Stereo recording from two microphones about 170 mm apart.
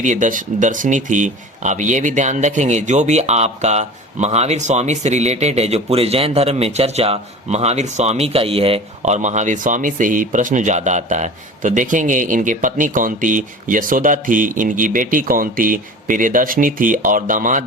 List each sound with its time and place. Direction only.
0.0 s speech: 50° right (ahead or behind)